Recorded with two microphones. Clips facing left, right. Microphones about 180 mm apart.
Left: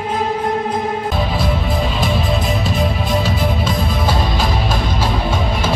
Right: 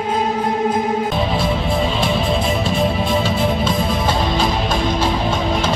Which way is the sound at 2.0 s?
Centre (ahead or behind).